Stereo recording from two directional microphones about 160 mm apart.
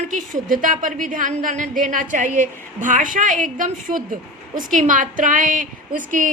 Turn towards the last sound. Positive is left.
turn(degrees=-55)  # may be behind; listen again after turning